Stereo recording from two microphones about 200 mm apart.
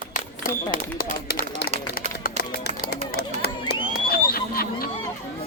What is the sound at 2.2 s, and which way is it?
Run, 50° left (ahead or behind).